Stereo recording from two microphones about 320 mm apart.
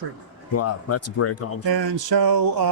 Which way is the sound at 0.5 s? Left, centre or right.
Left.